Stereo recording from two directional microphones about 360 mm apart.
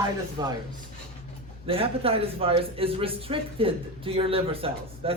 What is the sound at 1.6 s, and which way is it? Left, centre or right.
A man's voice, centre.